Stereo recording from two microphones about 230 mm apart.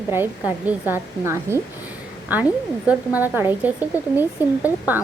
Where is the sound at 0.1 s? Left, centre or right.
Centre.